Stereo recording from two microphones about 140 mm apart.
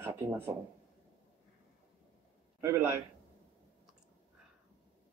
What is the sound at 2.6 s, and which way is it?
Speech, 20° right (ahead or behind).